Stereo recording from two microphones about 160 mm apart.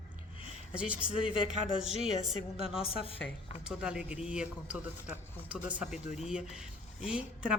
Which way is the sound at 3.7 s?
5° right (ahead or behind).